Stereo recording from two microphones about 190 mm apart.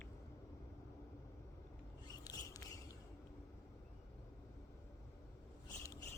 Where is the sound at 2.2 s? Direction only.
20° left (ahead or behind).